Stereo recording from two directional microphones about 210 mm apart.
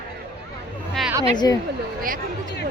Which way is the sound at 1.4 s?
15° left (ahead or behind).